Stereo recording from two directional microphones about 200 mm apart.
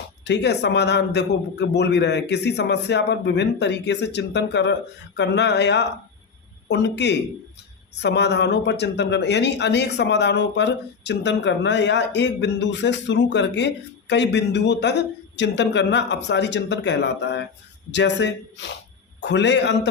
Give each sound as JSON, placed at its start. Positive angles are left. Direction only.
{"t": 0.3, "sound": "speech", "side_deg": 60}